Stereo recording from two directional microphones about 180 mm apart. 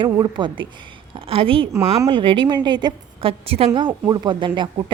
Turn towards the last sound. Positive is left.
turn(degrees=-25)  # may be behind; listen again after turning